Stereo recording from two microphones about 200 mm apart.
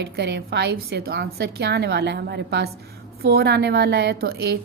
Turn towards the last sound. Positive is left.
turn(degrees=-50)  # may be behind; listen again after turning